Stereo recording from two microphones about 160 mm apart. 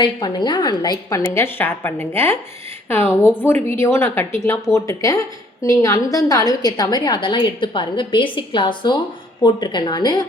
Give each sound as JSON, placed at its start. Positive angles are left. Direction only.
{"t": 0.0, "sound": "a woman's voice", "side_deg": 30}